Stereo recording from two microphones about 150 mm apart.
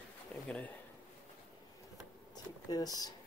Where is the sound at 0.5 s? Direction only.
10° left (ahead or behind).